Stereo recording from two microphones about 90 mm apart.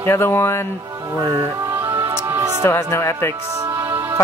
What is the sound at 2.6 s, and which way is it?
Speech, 30° left (ahead or behind).